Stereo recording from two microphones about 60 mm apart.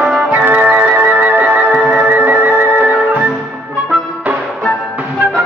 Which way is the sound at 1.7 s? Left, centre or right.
Centre.